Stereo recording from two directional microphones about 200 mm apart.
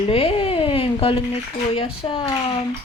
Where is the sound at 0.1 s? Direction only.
30° left (ahead or behind).